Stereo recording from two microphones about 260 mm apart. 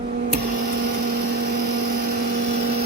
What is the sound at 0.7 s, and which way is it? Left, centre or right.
Vehicle, right.